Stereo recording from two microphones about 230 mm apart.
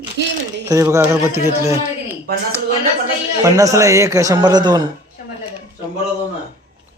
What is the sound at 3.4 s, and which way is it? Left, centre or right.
Speech, centre.